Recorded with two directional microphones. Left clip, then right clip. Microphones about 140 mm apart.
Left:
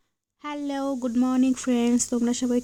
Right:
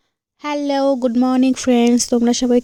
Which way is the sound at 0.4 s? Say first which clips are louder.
Right 12 dB; 40° right (ahead or behind).